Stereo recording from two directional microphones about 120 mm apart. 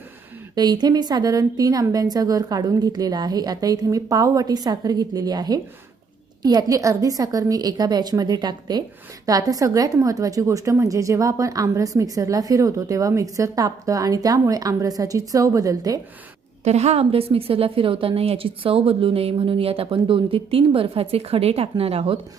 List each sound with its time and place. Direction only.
0.5 s a woman's voice: 35° right (ahead or behind)
16.6 s a woman's voice: 65° right (ahead or behind)